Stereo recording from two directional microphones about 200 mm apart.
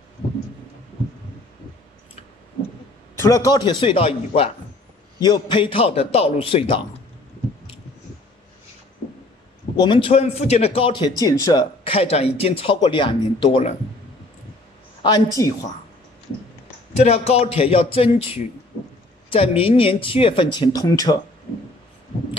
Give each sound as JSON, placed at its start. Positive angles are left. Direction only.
{"t": 3.2, "sound": "speech", "side_deg": 15}
{"t": 9.8, "sound": "speech", "side_deg": 25}
{"t": 15.0, "sound": "speech", "side_deg": 20}
{"t": 17.0, "sound": "speech", "side_deg": 30}